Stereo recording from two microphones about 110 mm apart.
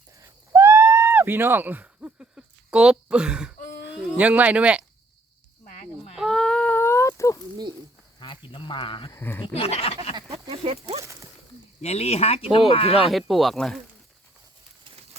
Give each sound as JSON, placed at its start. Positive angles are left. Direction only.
{"t": 0.5, "sound": "owl", "side_deg": -25}
{"t": 6.1, "sound": "a sound", "side_deg": 5}
{"t": 8.2, "sound": "speech", "side_deg": 45}
{"t": 9.1, "sound": "speech", "side_deg": 20}
{"t": 9.6, "sound": "a sound", "side_deg": 65}
{"t": 10.5, "sound": "speech", "side_deg": -60}
{"t": 11.0, "sound": "speech", "side_deg": -30}
{"t": 11.8, "sound": "speech", "side_deg": 70}
{"t": 13.1, "sound": "speech", "side_deg": 0}